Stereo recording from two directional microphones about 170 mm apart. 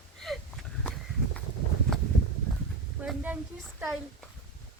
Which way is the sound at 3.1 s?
10° right (ahead or behind).